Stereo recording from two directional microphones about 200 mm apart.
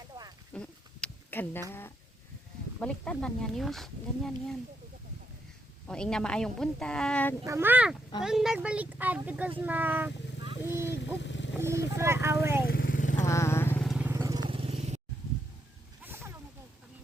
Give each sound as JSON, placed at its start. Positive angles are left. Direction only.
{"t": 0.1, "sound": "a sound", "side_deg": -20}
{"t": 0.5, "sound": "a sound", "side_deg": 5}
{"t": 2.8, "sound": "speech", "side_deg": 5}
{"t": 5.9, "sound": "speech", "side_deg": 5}
{"t": 7.4, "sound": "speech", "side_deg": -10}
{"t": 10.7, "sound": "vehicle", "side_deg": -10}
{"t": 10.9, "sound": "motorcycle", "side_deg": 65}
{"t": 11.6, "sound": "speech", "side_deg": -15}
{"t": 12.6, "sound": "vehicle", "side_deg": 45}
{"t": 13.2, "sound": "vehicle", "side_deg": 15}
{"t": 13.8, "sound": "vehicle", "side_deg": -5}
{"t": 16.0, "sound": "a sound", "side_deg": -10}